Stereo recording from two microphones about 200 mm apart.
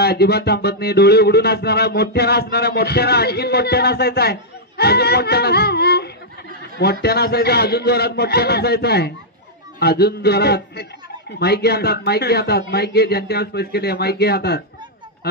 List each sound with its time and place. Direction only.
0.0 s speech: 55° left (ahead or behind)